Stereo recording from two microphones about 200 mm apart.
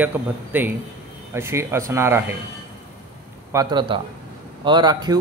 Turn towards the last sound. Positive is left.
turn(degrees=-20)  # may be behind; listen again after turning